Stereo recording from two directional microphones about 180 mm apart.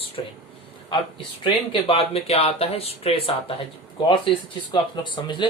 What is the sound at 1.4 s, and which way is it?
Speech, 30° left (ahead or behind).